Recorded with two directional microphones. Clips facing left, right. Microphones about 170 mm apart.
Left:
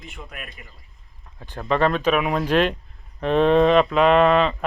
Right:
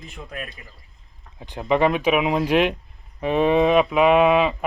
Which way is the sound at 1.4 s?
15° right (ahead or behind).